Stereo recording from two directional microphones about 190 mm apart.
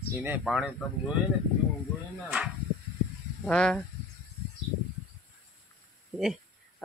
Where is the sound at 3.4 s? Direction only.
5° left (ahead or behind).